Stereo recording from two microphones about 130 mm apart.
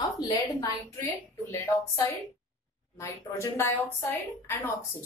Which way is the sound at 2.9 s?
20° left (ahead or behind).